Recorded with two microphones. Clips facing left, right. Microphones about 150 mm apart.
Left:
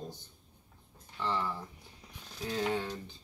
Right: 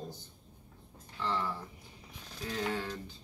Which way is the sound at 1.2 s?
15° left (ahead or behind).